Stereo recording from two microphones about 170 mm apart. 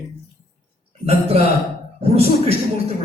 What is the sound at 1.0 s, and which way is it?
A man's voice, 35° right (ahead or behind).